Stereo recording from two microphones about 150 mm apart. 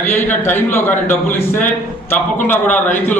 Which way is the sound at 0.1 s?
15° left (ahead or behind).